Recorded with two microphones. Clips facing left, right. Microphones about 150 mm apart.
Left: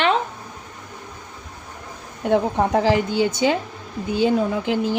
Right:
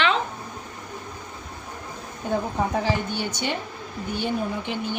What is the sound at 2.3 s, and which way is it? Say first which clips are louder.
A woman's voice: left 6 dB; 75° left (ahead or behind).